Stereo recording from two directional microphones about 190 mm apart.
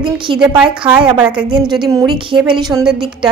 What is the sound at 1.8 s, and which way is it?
A woman's voice, 15° right (ahead or behind).